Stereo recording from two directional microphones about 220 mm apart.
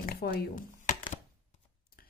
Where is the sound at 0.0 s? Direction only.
45° left (ahead or behind).